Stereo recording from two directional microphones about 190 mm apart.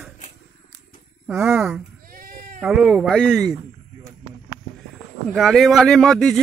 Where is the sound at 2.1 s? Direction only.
50° right (ahead or behind).